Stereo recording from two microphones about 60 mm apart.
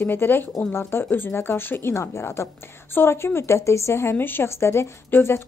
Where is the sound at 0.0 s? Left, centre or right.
Left.